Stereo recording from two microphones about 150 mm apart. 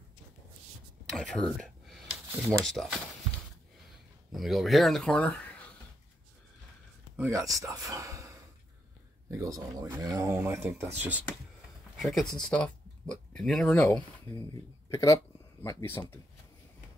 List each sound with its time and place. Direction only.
1.0 s a sound: 5° left (ahead or behind)
4.3 s speech: centre (ahead or behind)
7.2 s speech: 20° right (ahead or behind)
9.3 s speech: 20° right (ahead or behind)
12.0 s speech: centre (ahead or behind)